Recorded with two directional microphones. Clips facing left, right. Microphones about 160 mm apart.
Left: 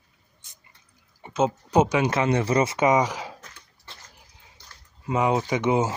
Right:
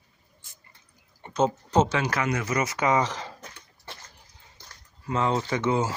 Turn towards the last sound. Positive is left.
turn(degrees=20)  # may be behind; listen again after turning